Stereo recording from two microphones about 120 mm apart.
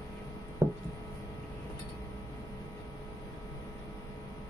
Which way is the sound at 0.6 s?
25° right (ahead or behind).